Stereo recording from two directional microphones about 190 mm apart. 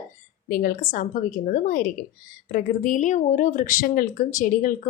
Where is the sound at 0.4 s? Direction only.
50° left (ahead or behind).